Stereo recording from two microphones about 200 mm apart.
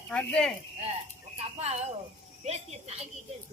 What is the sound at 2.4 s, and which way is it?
Speech, 30° right (ahead or behind).